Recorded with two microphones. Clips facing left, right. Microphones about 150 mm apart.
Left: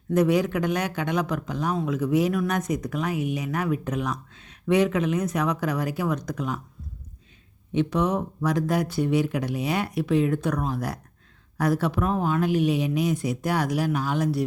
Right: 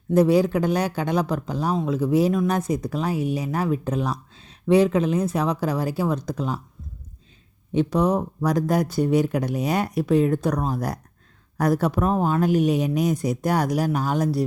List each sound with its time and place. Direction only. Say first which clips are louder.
0.1 s speech: right 4 dB; 30° right (ahead or behind)
7.7 s speech: right 3 dB; 35° right (ahead or behind)